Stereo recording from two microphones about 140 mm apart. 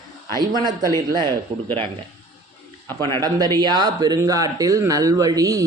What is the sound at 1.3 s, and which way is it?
Speech, 15° left (ahead or behind).